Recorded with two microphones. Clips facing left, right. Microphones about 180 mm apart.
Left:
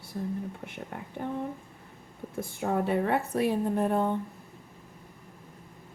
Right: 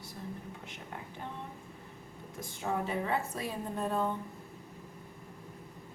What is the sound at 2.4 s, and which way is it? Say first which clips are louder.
A woman's voice: left 6 dB; 55° left (ahead or behind).